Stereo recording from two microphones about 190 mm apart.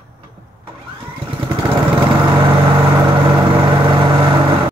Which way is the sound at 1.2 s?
25° right (ahead or behind).